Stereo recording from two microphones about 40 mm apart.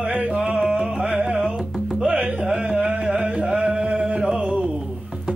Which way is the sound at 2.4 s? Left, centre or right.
Centre.